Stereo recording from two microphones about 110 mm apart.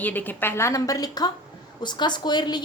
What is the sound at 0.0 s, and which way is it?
A woman's voice, 15° left (ahead or behind).